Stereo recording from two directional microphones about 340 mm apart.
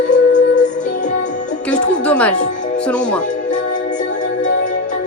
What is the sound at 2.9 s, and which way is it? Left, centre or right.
Speech, centre.